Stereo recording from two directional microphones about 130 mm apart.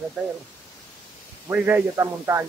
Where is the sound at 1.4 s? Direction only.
15° right (ahead or behind).